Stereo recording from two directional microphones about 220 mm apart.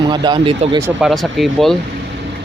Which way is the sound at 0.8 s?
10° right (ahead or behind).